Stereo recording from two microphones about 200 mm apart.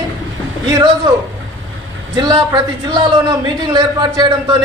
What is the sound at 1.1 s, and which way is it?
A man's voice, 20° right (ahead or behind).